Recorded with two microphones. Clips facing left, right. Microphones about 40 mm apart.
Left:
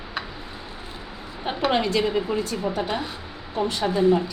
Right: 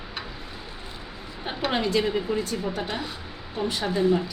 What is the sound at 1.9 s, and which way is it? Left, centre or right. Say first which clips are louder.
Speech: left 2 dB; centre.